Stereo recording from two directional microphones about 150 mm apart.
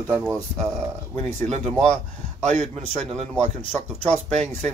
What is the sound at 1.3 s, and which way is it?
Speech, 50° right (ahead or behind).